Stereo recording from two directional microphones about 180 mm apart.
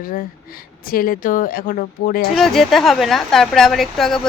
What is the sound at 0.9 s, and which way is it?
Speech, 55° left (ahead or behind).